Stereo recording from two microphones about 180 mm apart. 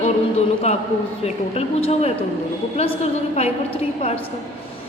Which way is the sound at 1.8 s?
35° left (ahead or behind).